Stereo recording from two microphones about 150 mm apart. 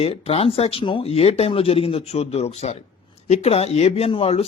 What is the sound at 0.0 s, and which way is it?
Speech, 40° left (ahead or behind).